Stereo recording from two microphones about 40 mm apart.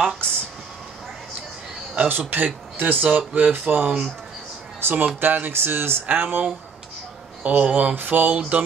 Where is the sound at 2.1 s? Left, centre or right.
Right.